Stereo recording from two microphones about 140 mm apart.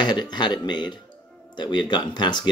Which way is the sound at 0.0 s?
30° left (ahead or behind).